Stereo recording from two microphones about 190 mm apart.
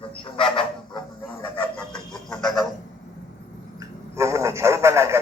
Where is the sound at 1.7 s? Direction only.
5° left (ahead or behind).